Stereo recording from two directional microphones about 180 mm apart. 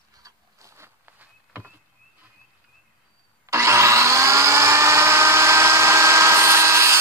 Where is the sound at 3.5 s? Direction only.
15° right (ahead or behind).